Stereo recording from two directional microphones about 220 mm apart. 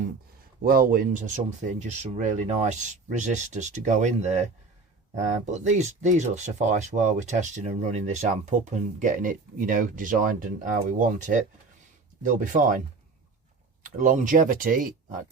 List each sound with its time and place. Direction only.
0.6 s speech: 40° right (ahead or behind)
13.8 s speech: 35° right (ahead or behind)